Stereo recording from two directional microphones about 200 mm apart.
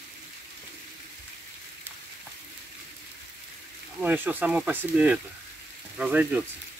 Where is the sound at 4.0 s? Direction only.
10° right (ahead or behind).